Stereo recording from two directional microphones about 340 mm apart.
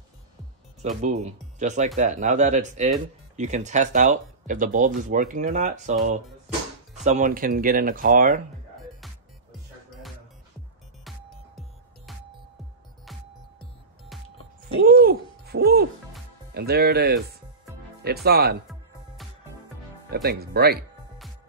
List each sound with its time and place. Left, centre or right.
1.0 s speech: centre
11.1 s music: centre
14.1 s music: centre
14.9 s hoot: right
16.5 s speech: right
20.1 s speech: right